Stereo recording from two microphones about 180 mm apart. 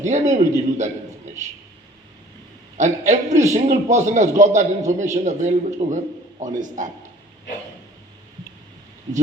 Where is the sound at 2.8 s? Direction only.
40° right (ahead or behind).